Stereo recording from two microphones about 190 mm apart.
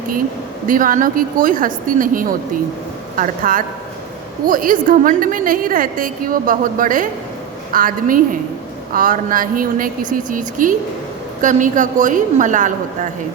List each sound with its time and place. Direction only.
0.7 s a woman's voice: 45° right (ahead or behind)